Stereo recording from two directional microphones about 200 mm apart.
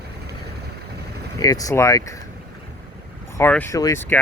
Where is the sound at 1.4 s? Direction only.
15° left (ahead or behind).